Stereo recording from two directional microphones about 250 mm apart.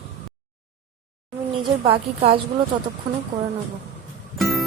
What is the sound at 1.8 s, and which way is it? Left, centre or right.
Speech, right.